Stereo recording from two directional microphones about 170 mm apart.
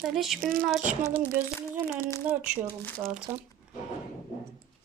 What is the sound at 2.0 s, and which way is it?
Speech, 15° left (ahead or behind).